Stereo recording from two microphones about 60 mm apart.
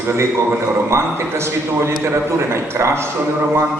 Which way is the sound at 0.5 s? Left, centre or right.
Right.